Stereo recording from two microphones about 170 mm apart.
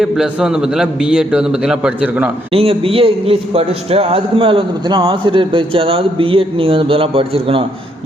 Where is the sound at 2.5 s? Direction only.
35° right (ahead or behind).